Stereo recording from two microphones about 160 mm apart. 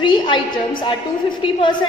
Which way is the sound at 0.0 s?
30° left (ahead or behind).